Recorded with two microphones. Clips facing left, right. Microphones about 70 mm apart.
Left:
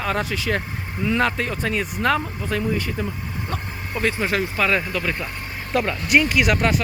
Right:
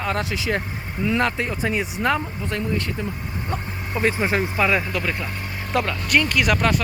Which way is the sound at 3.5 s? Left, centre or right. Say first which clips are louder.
Right 3 dB; centre.